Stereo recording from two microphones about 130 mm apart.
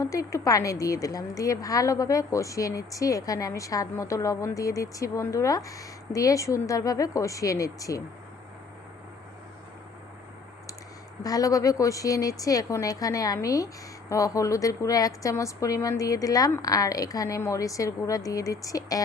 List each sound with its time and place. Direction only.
0.0 s a woman's voice: 25° left (ahead or behind)
11.2 s a woman's voice: 30° left (ahead or behind)